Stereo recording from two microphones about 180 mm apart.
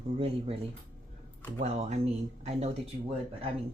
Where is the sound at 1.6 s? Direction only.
40° right (ahead or behind).